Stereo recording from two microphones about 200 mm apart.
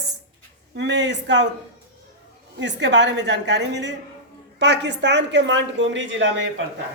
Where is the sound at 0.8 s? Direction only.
60° right (ahead or behind).